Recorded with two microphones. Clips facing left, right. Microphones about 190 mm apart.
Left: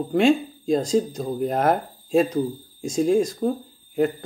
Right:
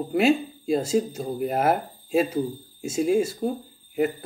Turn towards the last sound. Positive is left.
turn(degrees=-5)  # may be behind; listen again after turning